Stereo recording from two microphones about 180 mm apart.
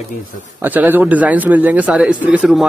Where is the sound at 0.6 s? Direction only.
10° right (ahead or behind).